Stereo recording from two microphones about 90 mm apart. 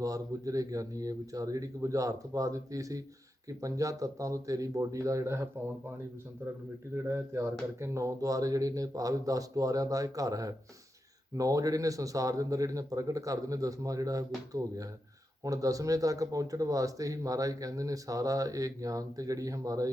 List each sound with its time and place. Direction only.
0.0 s a man's voice: 40° right (ahead or behind)
6.9 s a man's voice: 30° right (ahead or behind)